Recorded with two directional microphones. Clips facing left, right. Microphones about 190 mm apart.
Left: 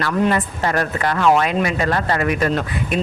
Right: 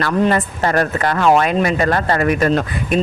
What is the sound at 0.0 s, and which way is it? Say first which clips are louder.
Speech: right 2 dB; 45° right (ahead or behind).